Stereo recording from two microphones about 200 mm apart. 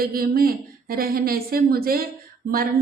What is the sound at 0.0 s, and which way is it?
Speech, 45° right (ahead or behind).